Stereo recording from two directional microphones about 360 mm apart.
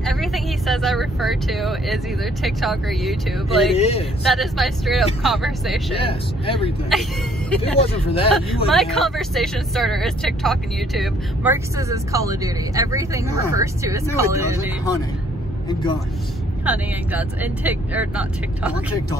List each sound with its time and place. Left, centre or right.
0.0 s vehicle: centre
2.4 s speech: centre
3.7 s speech: centre
4.2 s speech: centre
5.9 s speech: centre
6.9 s speech: centre
7.9 s speech: centre
8.6 s speech: centre
16.6 s speech: centre